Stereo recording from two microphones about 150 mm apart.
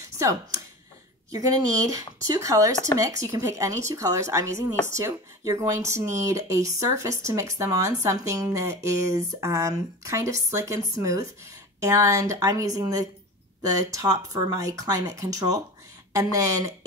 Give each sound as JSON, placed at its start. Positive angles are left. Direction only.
{"t": 0.2, "sound": "speech", "side_deg": -20}